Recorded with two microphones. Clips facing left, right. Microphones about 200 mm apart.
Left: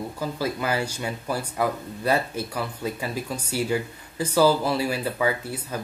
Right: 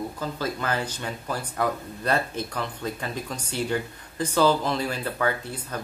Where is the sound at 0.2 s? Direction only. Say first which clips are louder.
Left 4 dB; 10° left (ahead or behind).